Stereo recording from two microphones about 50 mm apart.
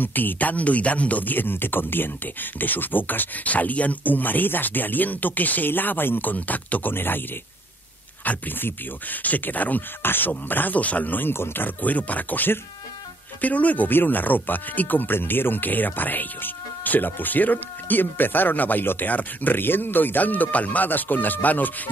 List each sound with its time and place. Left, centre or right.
0.0 s speech: left